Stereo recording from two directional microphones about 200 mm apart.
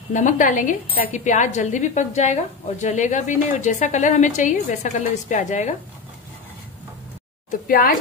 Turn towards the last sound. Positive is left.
turn(degrees=45)  # may be behind; listen again after turning